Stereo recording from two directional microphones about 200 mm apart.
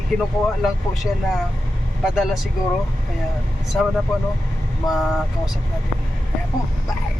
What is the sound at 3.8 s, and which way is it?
Speech, 5° left (ahead or behind).